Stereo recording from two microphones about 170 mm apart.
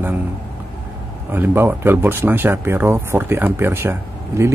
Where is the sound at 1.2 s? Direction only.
15° right (ahead or behind).